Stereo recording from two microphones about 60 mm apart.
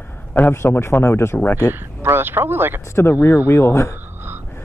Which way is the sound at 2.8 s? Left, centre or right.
Left.